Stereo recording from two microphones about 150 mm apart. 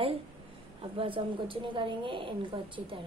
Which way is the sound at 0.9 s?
35° right (ahead or behind).